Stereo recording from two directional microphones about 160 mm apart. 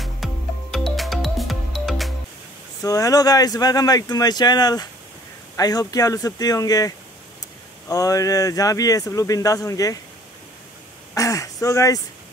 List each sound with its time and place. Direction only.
0.0 s music: centre (ahead or behind)
2.8 s speech: 20° left (ahead or behind)
7.9 s speech: 20° left (ahead or behind)
11.1 s speech: 20° left (ahead or behind)